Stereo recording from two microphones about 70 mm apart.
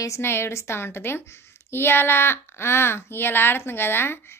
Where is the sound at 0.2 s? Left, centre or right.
Left.